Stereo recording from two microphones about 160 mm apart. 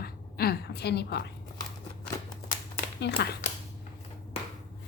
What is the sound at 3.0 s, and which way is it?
Speech, 90° left.